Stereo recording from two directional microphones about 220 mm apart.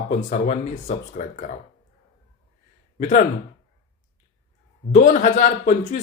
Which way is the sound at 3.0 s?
35° left (ahead or behind).